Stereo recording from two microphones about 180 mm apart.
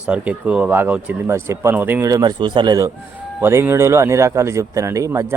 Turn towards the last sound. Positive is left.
turn(degrees=-15)  # may be behind; listen again after turning